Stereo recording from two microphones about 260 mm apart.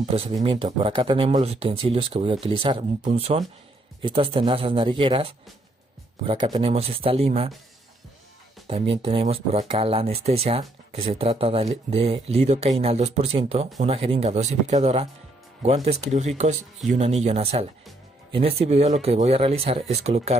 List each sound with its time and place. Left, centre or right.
0.0 s speech: right
8.6 s speech: right